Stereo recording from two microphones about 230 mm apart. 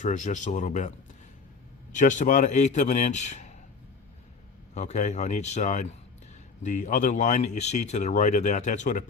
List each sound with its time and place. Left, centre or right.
0.0 s speech: left
4.7 s speech: left